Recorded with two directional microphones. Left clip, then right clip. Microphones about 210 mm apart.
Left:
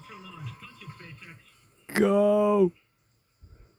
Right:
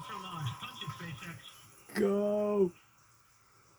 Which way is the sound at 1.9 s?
40° left (ahead or behind).